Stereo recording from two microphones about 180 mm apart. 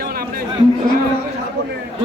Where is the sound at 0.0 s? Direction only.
55° right (ahead or behind).